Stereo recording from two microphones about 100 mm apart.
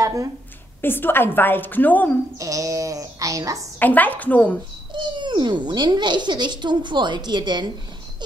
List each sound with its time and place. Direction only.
0.0 s a sound: 35° right (ahead or behind)
0.7 s a woman's voice: 20° left (ahead or behind)
2.3 s speech: 35° right (ahead or behind)
3.8 s a woman's voice: 15° left (ahead or behind)
4.9 s speech: 50° right (ahead or behind)